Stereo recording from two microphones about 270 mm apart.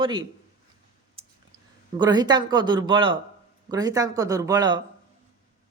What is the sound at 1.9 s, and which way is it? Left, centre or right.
A woman's voice, centre.